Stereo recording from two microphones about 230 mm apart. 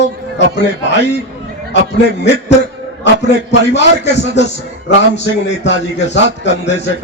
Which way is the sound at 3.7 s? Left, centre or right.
Left.